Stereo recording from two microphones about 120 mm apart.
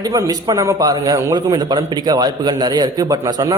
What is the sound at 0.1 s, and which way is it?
A man's voice, 30° right (ahead or behind).